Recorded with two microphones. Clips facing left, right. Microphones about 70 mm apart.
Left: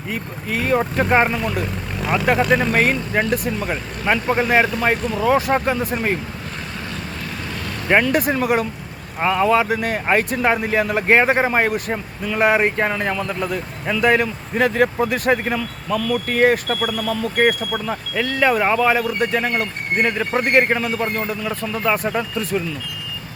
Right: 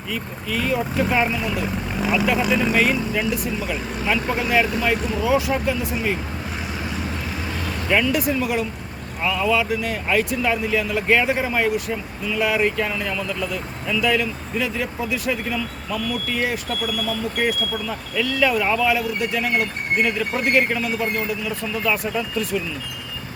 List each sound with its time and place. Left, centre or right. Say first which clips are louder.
0.1 s speech: left 1 dB; left
1.6 s vehicle: right 1 dB; centre
2.1 s speech: left 3 dB; left
2.4 s speech: left 3 dB; centre
2.7 s speech: left 2 dB; left
8.0 s speech: left 3 dB; left
16.0 s speech: left 5 dB; left
16.2 s speech: left 8 dB; left
17.8 s speech: left 2 dB; left